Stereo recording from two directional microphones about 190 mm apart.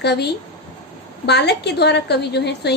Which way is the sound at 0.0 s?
60° left (ahead or behind).